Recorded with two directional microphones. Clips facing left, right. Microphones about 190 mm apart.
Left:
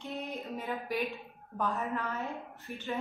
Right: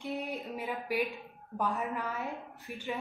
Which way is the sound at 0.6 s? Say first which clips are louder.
Right 1 dB; 10° right (ahead or behind).